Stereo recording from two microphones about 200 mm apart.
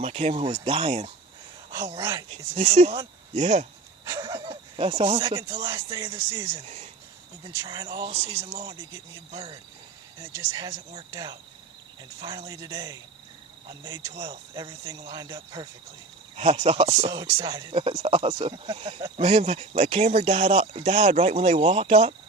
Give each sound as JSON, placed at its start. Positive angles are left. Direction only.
{"t": 0.0, "sound": "speech", "side_deg": -30}
{"t": 2.0, "sound": "speech", "side_deg": -15}
{"t": 2.3, "sound": "speech", "side_deg": -30}
{"t": 4.0, "sound": "speech", "side_deg": -20}
{"t": 6.5, "sound": "speech", "side_deg": -30}
{"t": 7.4, "sound": "speech", "side_deg": -20}
{"t": 17.1, "sound": "speech", "side_deg": -15}